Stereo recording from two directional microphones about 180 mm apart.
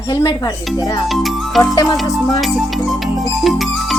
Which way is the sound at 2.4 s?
Centre (ahead or behind).